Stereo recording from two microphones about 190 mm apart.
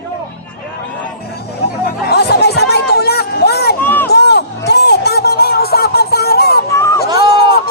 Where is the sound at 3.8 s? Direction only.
10° left (ahead or behind).